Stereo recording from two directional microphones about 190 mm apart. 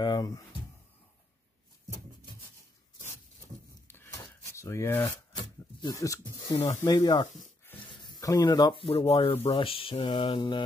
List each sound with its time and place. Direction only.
0.0 s speech: 20° left (ahead or behind)
3.8 s a sound: 10° left (ahead or behind)
5.8 s speech: 20° left (ahead or behind)